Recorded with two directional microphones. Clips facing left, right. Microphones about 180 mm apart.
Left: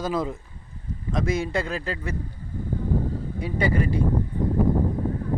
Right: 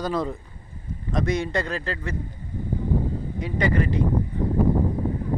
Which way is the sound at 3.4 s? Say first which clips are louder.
Right 1 dB; 10° left (ahead or behind).